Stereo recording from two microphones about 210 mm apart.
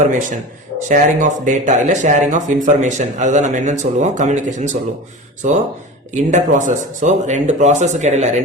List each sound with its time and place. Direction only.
0.0 s speech: 35° right (ahead or behind)